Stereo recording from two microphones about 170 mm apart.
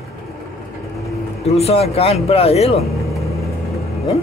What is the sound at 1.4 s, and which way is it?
Speech, 35° left (ahead or behind).